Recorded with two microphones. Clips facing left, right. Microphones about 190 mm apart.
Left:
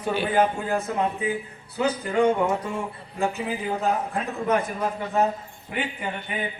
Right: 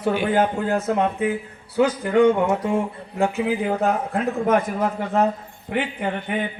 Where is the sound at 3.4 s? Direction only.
65° right (ahead or behind).